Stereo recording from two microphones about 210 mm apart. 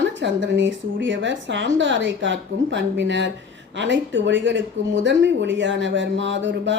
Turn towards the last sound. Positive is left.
turn(degrees=-60)  # may be behind; listen again after turning